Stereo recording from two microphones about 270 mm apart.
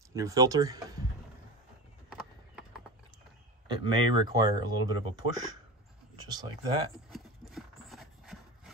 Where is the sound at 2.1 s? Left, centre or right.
Centre.